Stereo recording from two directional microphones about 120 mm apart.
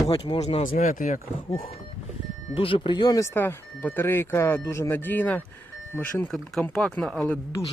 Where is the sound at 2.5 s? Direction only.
45° left (ahead or behind).